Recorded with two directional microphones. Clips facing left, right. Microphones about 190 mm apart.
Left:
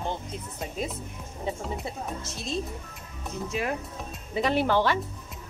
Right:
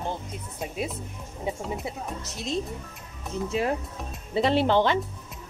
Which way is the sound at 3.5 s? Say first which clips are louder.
Right 4 dB; 30° right (ahead or behind).